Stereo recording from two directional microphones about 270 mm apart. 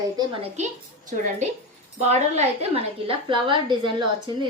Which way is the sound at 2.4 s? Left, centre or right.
Right.